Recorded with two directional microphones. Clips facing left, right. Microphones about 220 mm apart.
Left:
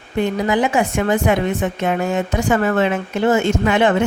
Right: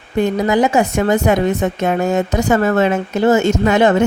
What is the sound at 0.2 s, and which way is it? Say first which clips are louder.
Speech: right 3 dB; 40° right (ahead or behind).